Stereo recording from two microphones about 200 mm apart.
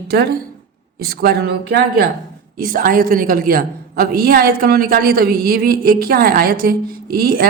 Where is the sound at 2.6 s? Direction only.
45° right (ahead or behind).